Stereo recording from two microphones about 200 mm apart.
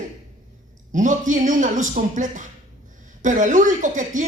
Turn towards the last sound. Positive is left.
turn(degrees=-40)  # may be behind; listen again after turning